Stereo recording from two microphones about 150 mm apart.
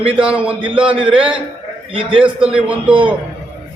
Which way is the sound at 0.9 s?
35° right (ahead or behind).